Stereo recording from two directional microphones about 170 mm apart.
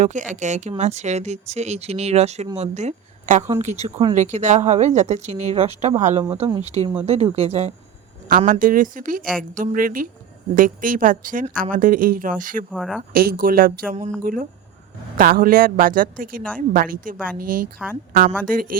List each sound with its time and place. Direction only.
0.0 s speech: 45° right (ahead or behind)
8.3 s speech: 50° right (ahead or behind)
12.7 s speech: centre (ahead or behind)
13.1 s speech: 60° right (ahead or behind)
15.2 s speech: 55° right (ahead or behind)
17.8 s speech: 5° right (ahead or behind)
18.4 s speech: 55° right (ahead or behind)